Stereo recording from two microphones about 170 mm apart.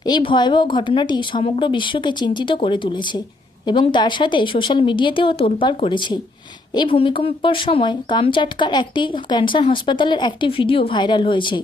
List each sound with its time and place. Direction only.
0.0 s speech: 25° left (ahead or behind)